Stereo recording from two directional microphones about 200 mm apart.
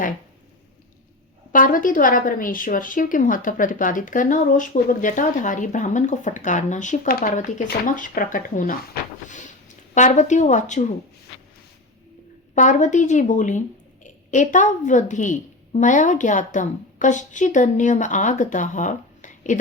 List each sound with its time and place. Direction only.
1.5 s a woman's voice: 40° left (ahead or behind)
12.5 s speech: 35° left (ahead or behind)